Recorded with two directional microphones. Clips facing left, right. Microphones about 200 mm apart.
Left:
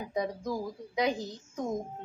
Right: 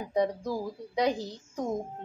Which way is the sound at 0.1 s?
35° right (ahead or behind).